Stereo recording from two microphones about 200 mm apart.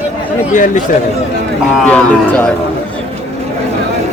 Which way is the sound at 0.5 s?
40° left (ahead or behind).